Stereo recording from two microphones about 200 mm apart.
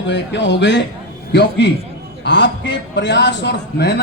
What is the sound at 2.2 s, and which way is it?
A man's voice, 65° left (ahead or behind).